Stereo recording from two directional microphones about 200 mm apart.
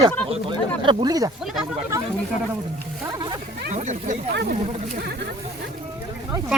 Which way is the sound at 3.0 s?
20° right (ahead or behind).